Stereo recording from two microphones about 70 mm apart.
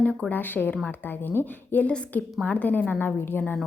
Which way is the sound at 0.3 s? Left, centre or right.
Left.